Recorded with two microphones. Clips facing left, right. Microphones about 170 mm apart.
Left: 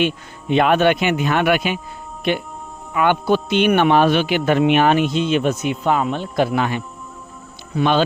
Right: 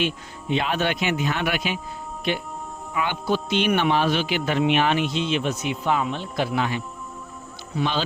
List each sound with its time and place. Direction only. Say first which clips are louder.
0.0 s a man's voice: left 6 dB; 60° left (ahead or behind)